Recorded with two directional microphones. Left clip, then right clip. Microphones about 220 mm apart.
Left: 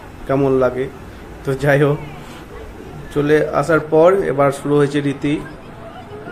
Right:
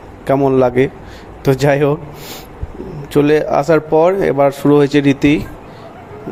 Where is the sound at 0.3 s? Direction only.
35° right (ahead or behind).